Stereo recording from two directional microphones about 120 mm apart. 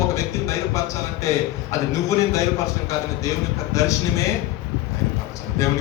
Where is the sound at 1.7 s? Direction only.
25° left (ahead or behind).